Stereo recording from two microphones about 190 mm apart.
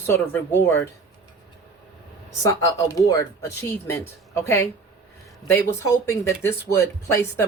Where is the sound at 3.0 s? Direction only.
20° left (ahead or behind).